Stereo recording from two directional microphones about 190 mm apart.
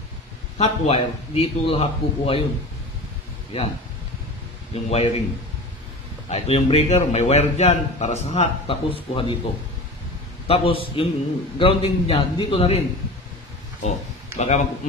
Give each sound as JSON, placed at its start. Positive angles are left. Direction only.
{"t": 0.6, "sound": "a man's voice", "side_deg": 30}
{"t": 4.8, "sound": "a man's voice", "side_deg": 35}
{"t": 6.2, "sound": "a man's voice", "side_deg": 35}
{"t": 10.4, "sound": "a man's voice", "side_deg": 30}
{"t": 13.8, "sound": "speech", "side_deg": 35}